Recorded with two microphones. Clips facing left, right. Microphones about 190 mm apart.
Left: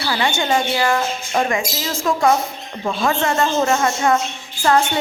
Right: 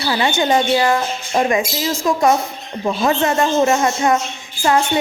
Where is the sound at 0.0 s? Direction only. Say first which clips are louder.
Right 3 dB; 20° right (ahead or behind).